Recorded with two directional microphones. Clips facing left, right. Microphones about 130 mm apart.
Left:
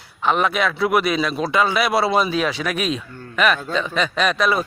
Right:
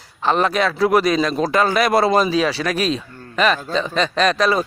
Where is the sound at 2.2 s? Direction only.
Centre (ahead or behind).